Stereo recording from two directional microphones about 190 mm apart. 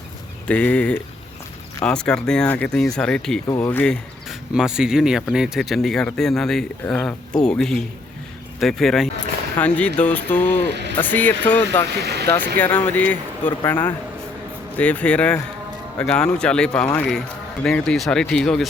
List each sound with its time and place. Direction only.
0.4 s speech: 5° left (ahead or behind)
3.4 s speech: 20° left (ahead or behind)
3.7 s speech: 10° left (ahead or behind)
4.3 s speech: 5° right (ahead or behind)
12.0 s speech: 60° right (ahead or behind)
12.5 s speech: 10° left (ahead or behind)
14.8 s speech: 5° left (ahead or behind)